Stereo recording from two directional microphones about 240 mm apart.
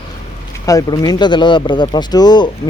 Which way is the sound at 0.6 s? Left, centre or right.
Centre.